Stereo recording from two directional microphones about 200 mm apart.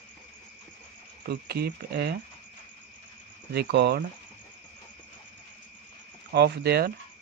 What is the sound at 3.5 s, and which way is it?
Speech, 55° right (ahead or behind).